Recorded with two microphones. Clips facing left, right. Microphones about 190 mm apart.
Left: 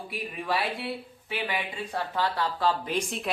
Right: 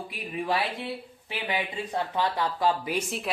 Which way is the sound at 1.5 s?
20° right (ahead or behind).